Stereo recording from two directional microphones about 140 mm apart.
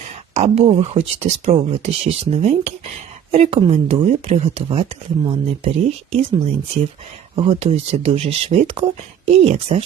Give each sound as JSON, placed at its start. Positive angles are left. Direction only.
{"t": 0.3, "sound": "speech", "side_deg": -50}